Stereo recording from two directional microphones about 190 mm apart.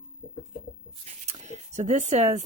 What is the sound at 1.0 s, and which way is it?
Writing, 35° right (ahead or behind).